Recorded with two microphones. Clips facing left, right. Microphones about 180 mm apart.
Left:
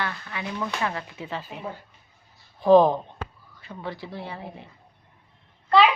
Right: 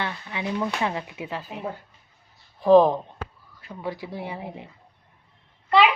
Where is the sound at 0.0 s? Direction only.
20° right (ahead or behind).